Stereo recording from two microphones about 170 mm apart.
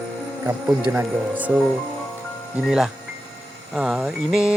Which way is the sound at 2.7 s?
5° right (ahead or behind).